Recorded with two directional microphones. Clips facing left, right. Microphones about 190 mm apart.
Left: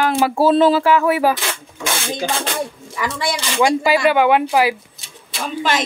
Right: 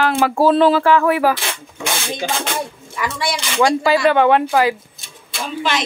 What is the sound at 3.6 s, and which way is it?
Speech, 15° left (ahead or behind).